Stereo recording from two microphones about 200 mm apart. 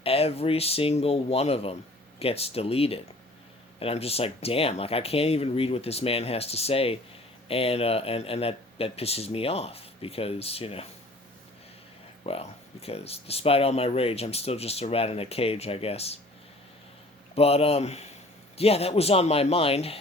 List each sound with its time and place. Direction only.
0.0 s speech: 30° left (ahead or behind)
12.2 s speech: 30° left (ahead or behind)
17.3 s speech: 30° left (ahead or behind)